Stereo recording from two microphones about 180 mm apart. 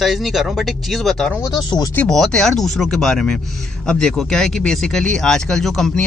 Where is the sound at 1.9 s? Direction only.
5° left (ahead or behind).